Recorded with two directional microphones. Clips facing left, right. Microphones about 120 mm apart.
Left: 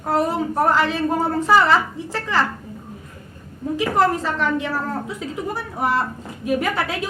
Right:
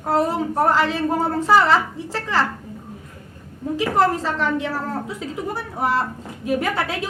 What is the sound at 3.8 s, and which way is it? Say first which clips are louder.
A woman's voice: even; 30° right (ahead or behind).